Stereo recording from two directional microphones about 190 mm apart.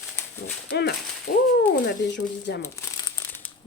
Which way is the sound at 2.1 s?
65° left (ahead or behind).